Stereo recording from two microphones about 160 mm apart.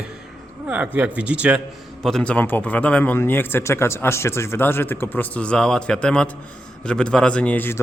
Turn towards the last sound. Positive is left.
turn(degrees=10)  # may be behind; listen again after turning